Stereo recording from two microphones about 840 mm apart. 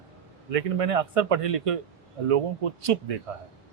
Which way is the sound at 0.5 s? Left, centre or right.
Right.